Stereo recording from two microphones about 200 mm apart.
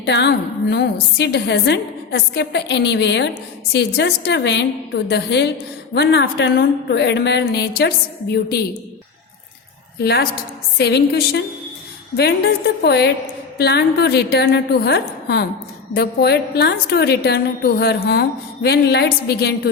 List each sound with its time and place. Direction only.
0.0 s a woman's voice: 60° left (ahead or behind)
10.0 s a woman's voice: 55° left (ahead or behind)